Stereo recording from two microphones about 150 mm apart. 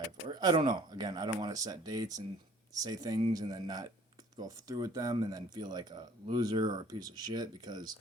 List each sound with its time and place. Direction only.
0.3 s speech: 30° right (ahead or behind)